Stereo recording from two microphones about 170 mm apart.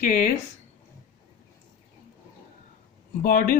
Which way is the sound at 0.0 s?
55° left (ahead or behind).